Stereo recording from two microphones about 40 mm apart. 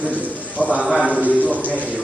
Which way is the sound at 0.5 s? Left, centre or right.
Left.